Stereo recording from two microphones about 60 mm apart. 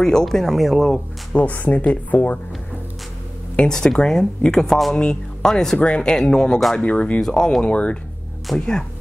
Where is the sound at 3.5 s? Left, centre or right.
Centre.